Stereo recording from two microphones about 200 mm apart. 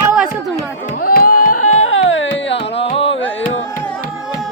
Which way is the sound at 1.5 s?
90° left.